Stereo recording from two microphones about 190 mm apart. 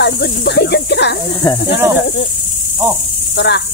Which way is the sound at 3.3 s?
65° left (ahead or behind).